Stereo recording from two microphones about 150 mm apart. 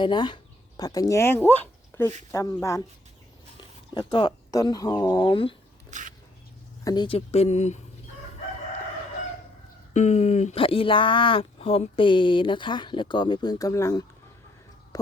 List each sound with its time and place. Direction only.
0.0 s speech: 30° left (ahead or behind)
3.9 s speech: 35° left (ahead or behind)
5.9 s a sound: 60° right (ahead or behind)
6.8 s speech: 30° left (ahead or behind)
7.3 s speech: 45° left (ahead or behind)
9.9 s speech: 50° left (ahead or behind); by 14.0 s 20° left (ahead or behind)